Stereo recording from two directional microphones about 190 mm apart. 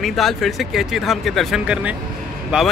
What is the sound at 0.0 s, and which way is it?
Speech, centre (ahead or behind).